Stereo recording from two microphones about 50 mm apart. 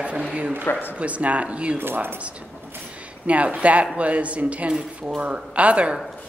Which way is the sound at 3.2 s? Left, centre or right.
Right.